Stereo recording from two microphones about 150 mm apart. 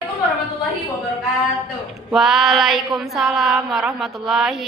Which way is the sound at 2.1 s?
Centre (ahead or behind).